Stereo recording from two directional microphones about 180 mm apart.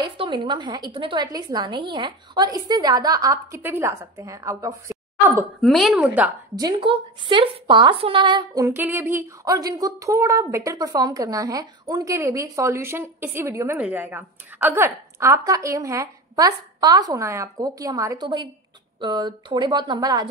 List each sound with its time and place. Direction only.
0.2 s a woman's voice: 25° right (ahead or behind)
5.6 s a woman's voice: centre (ahead or behind)
6.5 s a woman's voice: 25° right (ahead or behind)
8.6 s a woman's voice: 10° right (ahead or behind)